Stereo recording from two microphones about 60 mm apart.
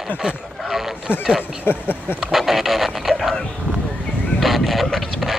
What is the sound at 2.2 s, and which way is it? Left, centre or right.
Speech, centre.